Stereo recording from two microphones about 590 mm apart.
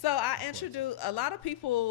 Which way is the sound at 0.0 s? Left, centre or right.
Left.